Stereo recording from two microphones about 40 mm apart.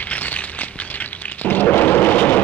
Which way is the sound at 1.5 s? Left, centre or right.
Left.